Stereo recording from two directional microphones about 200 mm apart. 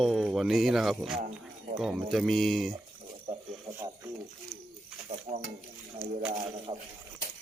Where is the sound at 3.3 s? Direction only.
30° right (ahead or behind).